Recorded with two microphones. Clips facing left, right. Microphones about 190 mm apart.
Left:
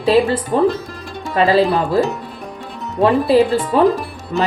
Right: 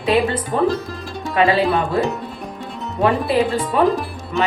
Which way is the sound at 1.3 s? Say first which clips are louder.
Left 2 dB; 35° left (ahead or behind).